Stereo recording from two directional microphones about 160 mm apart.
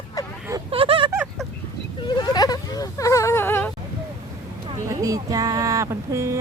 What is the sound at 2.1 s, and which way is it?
Whimper, 30° left (ahead or behind).